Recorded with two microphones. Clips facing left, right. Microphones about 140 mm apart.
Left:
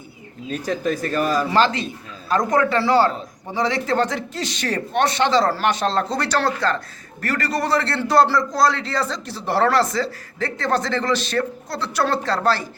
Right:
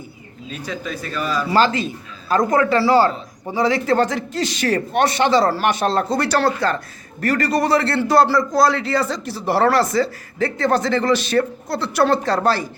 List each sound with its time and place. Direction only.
0.5 s speech: 45° left (ahead or behind)
1.5 s a man's voice: 5° right (ahead or behind)